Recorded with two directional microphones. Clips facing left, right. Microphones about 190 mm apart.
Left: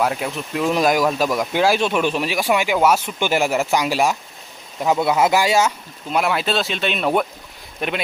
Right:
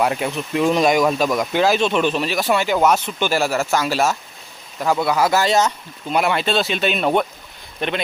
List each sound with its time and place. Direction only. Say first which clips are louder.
0.0 s speech: right 1 dB; centre (ahead or behind); by 5.4 s 20° left (ahead or behind)
5.4 s speech: even; 10° left (ahead or behind)